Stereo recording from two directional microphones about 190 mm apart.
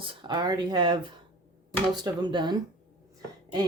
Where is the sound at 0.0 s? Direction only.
25° right (ahead or behind).